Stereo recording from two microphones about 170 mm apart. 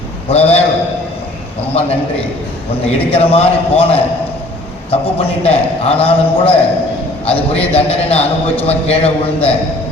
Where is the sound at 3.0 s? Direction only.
35° left (ahead or behind).